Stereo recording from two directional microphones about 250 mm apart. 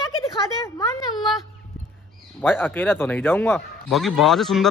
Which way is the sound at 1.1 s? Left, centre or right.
Centre.